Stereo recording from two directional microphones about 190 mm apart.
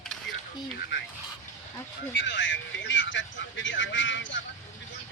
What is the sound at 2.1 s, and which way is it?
Speech, 70° left (ahead or behind).